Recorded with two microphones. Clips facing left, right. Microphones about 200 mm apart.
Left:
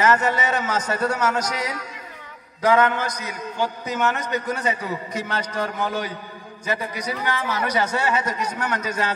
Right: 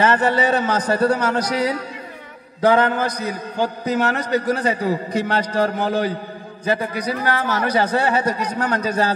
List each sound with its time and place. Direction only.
0.0 s a man's voice: 30° right (ahead or behind)